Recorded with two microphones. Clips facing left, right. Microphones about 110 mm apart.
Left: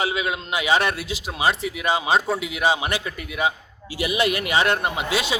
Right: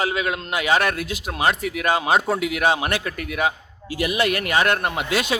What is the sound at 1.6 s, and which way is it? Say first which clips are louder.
Speech: right 2 dB; 55° right (ahead or behind).